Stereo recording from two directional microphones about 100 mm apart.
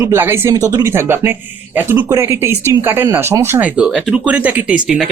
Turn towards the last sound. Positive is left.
turn(degrees=-10)  # may be behind; listen again after turning